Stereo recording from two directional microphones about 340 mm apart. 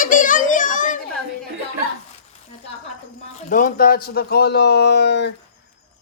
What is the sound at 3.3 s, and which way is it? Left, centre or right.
A man's voice, left.